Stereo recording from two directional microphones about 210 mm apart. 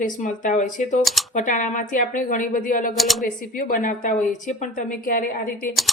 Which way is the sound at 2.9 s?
Centre (ahead or behind).